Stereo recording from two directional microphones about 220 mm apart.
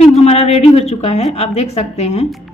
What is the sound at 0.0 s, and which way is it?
A woman's voice, 30° left (ahead or behind).